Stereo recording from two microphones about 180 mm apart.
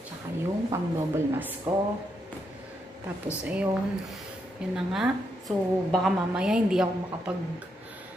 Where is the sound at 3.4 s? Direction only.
5° right (ahead or behind).